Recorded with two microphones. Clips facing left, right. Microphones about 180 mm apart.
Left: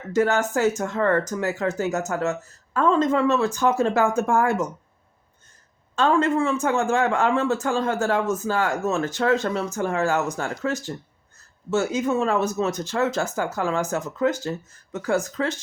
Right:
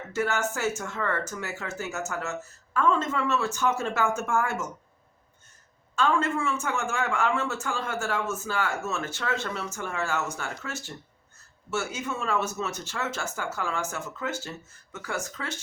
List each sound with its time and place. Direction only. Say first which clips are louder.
0.2 s speech: left 7 dB; 35° left (ahead or behind)
6.0 s speech: left 6 dB; 35° left (ahead or behind)
12.0 s speech: left 7 dB; 35° left (ahead or behind)